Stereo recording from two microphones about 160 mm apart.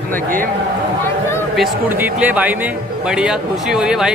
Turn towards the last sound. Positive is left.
turn(degrees=-5)  # may be behind; listen again after turning